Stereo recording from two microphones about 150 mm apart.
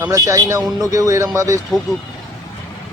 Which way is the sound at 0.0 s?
20° right (ahead or behind).